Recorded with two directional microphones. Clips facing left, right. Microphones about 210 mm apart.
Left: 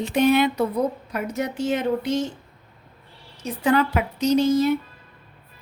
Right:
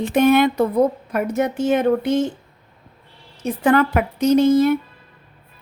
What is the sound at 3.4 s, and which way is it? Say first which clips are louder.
Speech: right 4 dB; 55° right (ahead or behind).